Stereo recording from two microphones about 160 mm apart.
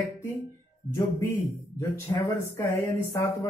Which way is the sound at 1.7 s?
15° left (ahead or behind).